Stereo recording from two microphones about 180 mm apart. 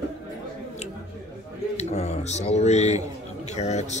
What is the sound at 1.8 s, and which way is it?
Speech, 35° left (ahead or behind).